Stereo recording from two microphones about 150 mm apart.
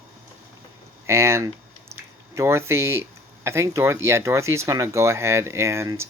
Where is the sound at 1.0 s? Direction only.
15° right (ahead or behind).